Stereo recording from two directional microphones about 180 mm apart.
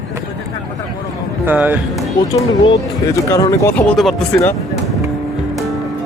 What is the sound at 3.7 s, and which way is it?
Speech, 5° left (ahead or behind).